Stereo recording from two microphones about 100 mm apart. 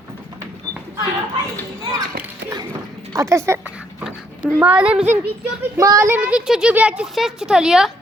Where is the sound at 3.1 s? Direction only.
30° right (ahead or behind).